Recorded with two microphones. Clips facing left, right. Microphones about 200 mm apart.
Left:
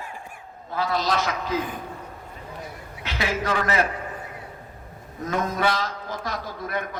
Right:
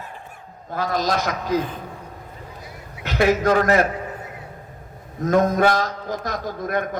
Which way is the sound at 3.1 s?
45° right (ahead or behind).